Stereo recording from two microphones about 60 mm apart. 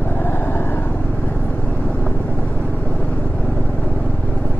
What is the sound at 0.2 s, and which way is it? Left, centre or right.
Vehicle, left.